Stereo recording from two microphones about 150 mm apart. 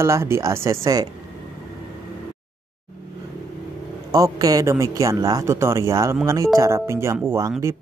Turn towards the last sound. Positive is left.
turn(degrees=-15)  # may be behind; listen again after turning